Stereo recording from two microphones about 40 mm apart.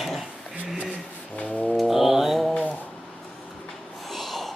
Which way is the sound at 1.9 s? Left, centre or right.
Centre.